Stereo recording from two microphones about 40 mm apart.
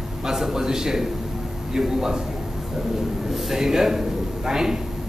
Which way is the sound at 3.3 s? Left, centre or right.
Centre.